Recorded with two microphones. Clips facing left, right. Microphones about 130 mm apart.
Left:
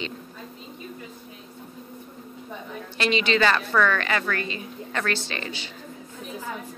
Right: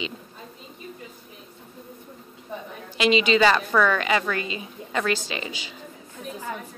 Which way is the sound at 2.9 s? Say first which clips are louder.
Right 3 dB; 10° right (ahead or behind).